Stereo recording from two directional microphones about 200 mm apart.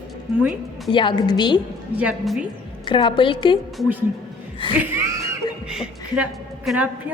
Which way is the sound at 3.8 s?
10° right (ahead or behind).